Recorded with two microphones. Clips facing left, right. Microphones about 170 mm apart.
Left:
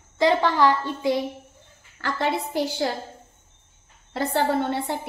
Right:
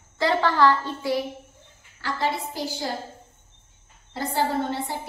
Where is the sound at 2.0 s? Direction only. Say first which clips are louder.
Left 2 dB; 60° left (ahead or behind).